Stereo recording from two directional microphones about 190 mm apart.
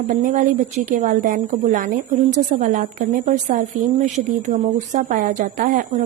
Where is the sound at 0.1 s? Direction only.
40° right (ahead or behind).